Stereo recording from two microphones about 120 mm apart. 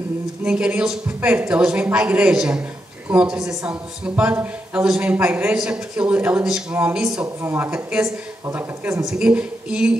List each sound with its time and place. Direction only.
0.5 s a man's voice: 10° right (ahead or behind)
7.3 s a man's voice: 20° right (ahead or behind)
9.0 s a man's voice: 10° right (ahead or behind)